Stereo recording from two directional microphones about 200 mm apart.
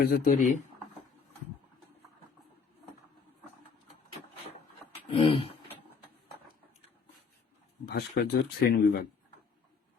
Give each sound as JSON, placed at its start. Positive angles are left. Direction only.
{"t": 0.0, "sound": "speech", "side_deg": 45}
{"t": 5.1, "sound": "a sound", "side_deg": 25}
{"t": 7.9, "sound": "speech", "side_deg": 50}